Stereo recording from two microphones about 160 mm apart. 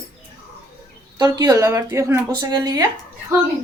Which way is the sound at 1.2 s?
25° right (ahead or behind).